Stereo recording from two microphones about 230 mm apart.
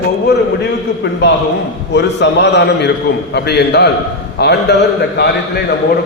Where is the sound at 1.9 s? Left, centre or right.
Left.